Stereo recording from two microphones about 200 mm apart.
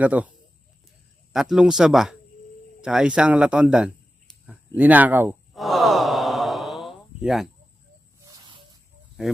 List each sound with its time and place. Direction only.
0.0 s a man's voice: 5° right (ahead or behind)
5.6 s sigh: centre (ahead or behind)
8.2 s snake: 25° right (ahead or behind)